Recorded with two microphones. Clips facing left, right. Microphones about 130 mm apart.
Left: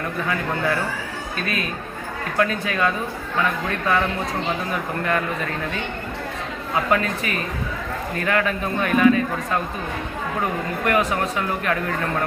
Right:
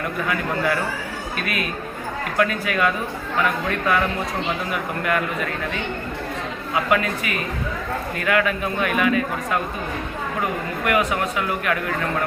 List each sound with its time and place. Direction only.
1.4 s a man's voice: 30° left (ahead or behind)
6.9 s a man's voice: 35° left (ahead or behind)
10.8 s a man's voice: 35° left (ahead or behind)